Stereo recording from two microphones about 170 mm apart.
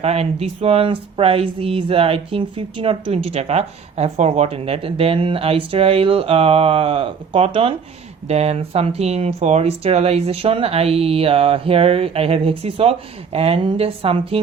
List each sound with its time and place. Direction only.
0.0 s speech: 35° right (ahead or behind)